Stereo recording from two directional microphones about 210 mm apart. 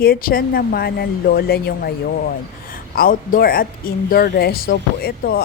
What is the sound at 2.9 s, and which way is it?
Speech, 45° left (ahead or behind).